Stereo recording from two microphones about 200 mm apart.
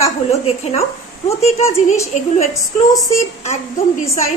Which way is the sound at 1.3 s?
30° left (ahead or behind).